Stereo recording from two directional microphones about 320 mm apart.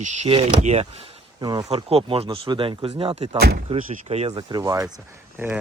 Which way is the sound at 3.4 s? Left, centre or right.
Right.